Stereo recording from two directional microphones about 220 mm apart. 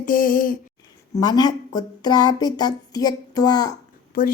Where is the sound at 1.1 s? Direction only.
20° left (ahead or behind).